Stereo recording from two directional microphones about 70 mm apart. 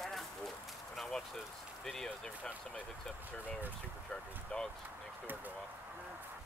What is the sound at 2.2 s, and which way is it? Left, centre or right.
Speech, centre.